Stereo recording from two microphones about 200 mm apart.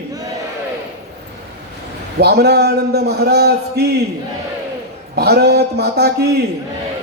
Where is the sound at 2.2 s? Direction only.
55° right (ahead or behind).